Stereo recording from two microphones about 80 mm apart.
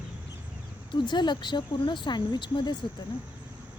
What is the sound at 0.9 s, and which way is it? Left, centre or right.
Speech, left.